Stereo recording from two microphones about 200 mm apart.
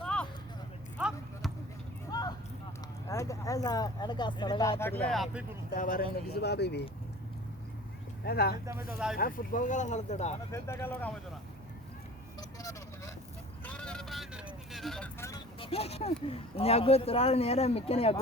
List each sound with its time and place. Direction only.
0.0 s a sound: 5° left (ahead or behind)
0.9 s basketball bounce: 5° right (ahead or behind)
2.0 s a sound: 20° left (ahead or behind)
3.1 s speech: 15° left (ahead or behind); by 5.5 s centre (ahead or behind)
5.7 s speech: 45° left (ahead or behind)
8.2 s speech: 50° left (ahead or behind); by 10.3 s 35° left (ahead or behind)
10.5 s speech: 15° left (ahead or behind)
12.4 s vehicle: 15° left (ahead or behind)
13.7 s vehicle: 5° left (ahead or behind)
15.3 s speech: 30° left (ahead or behind)